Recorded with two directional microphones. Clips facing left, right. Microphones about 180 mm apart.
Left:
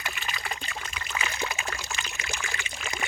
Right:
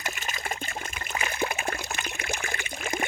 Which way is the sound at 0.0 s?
45° right (ahead or behind).